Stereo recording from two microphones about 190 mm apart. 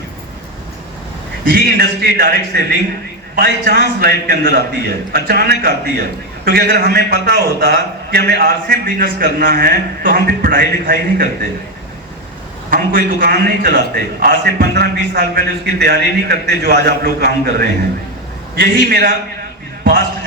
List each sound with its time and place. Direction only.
1.5 s a man's voice: 55° right (ahead or behind)
12.7 s a man's voice: 55° right (ahead or behind)